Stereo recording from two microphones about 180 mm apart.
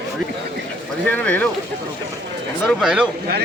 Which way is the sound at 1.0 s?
10° left (ahead or behind).